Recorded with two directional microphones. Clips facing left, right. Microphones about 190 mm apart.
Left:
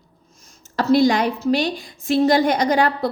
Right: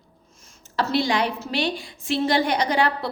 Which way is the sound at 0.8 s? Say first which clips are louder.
Left 6 dB; 45° left (ahead or behind).